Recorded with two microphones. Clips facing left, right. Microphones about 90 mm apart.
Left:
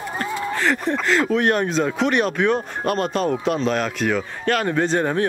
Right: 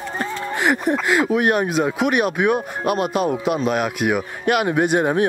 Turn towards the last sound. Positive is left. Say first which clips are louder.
# right 2 dB
turn(degrees=-15)  # may be behind; listen again after turning